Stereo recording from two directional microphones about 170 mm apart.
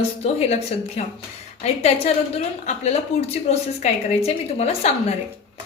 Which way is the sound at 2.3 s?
40° left (ahead or behind).